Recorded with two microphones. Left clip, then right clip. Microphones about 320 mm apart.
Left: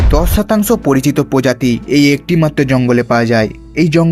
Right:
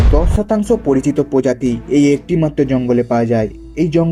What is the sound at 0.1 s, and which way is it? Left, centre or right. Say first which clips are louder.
A man's voice: left 4 dB; left.